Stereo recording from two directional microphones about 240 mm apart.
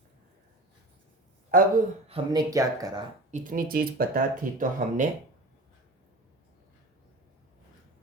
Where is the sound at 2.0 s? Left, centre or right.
Right.